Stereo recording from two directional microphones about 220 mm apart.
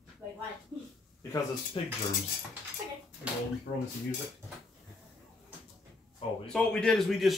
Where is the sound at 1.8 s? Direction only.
25° left (ahead or behind).